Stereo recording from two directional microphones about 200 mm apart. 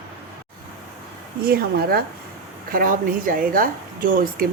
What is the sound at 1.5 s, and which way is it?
Speech, 50° right (ahead or behind).